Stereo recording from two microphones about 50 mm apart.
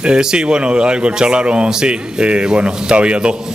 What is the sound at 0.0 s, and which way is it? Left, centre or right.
Speech, centre.